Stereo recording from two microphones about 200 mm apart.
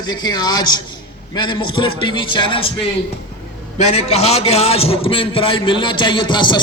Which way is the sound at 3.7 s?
35° left (ahead or behind).